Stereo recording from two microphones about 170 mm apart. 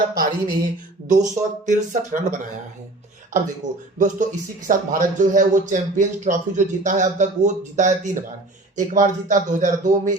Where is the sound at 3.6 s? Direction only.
45° right (ahead or behind).